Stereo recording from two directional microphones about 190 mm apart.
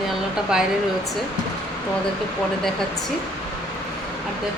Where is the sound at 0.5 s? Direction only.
5° right (ahead or behind).